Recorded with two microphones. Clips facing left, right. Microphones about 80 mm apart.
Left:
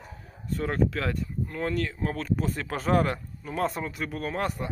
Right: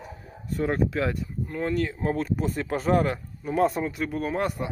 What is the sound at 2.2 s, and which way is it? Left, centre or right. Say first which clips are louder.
Speech: right 2 dB; centre.